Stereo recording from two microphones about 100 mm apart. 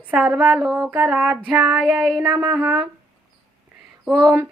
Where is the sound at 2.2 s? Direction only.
40° right (ahead or behind).